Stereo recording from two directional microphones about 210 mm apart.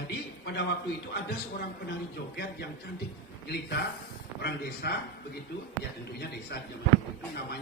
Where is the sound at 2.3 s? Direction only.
50° left (ahead or behind).